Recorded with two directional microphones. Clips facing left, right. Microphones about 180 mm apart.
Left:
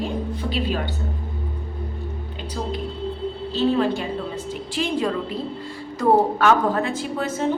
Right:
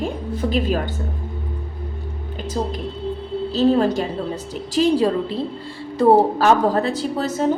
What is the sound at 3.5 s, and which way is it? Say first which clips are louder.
A woman's voice: right 4 dB; 40° right (ahead or behind).